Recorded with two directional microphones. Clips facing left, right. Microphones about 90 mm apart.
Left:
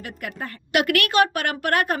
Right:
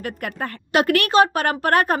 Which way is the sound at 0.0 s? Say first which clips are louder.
Right 5 dB; 50° right (ahead or behind).